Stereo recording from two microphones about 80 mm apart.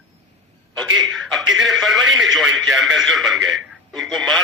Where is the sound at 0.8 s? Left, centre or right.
Centre.